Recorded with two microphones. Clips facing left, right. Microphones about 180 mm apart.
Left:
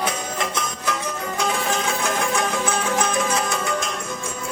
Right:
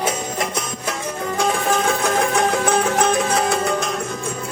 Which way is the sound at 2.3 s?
60° right (ahead or behind).